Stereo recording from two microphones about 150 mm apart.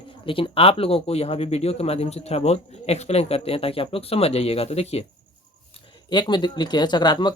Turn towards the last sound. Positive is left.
turn(degrees=30)  # may be behind; listen again after turning